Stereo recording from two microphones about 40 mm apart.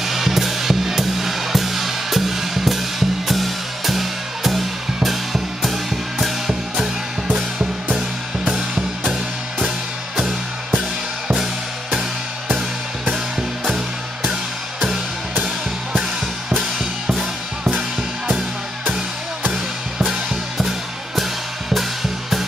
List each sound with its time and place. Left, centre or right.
0.0 s music: centre
8.5 s music: centre
13.1 s music: centre
16.7 s music: centre
20.1 s drum kit: centre